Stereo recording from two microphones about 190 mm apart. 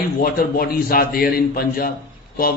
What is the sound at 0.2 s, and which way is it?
A man's voice, 50° left (ahead or behind).